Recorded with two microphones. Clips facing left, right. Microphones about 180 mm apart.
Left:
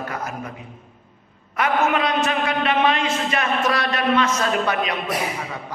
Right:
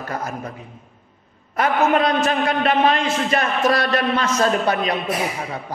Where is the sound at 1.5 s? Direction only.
40° right (ahead or behind).